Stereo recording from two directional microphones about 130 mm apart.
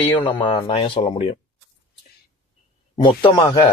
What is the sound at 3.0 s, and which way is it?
Speech, 40° left (ahead or behind).